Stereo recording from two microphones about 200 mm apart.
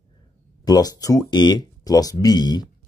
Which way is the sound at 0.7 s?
20° left (ahead or behind).